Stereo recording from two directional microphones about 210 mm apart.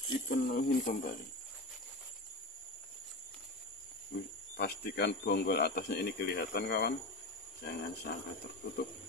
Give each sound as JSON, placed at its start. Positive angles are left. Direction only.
{"t": 0.3, "sound": "speech", "side_deg": 45}
{"t": 4.1, "sound": "speech", "side_deg": 50}